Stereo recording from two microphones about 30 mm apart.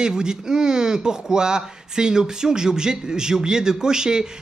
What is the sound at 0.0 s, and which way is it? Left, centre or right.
Speech, right.